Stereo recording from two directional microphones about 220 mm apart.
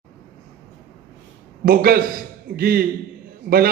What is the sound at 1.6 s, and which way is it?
A man's voice, 45° right (ahead or behind).